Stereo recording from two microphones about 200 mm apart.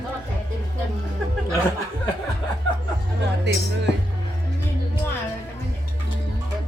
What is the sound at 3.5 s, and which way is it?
Speech, 60° right (ahead or behind).